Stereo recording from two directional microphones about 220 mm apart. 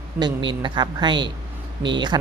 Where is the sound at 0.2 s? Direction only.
20° right (ahead or behind).